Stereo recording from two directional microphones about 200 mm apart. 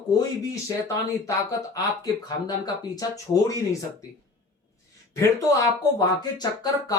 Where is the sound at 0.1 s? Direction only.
15° left (ahead or behind).